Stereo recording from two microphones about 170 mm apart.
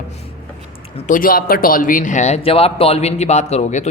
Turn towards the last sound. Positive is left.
turn(degrees=45)  # may be behind; listen again after turning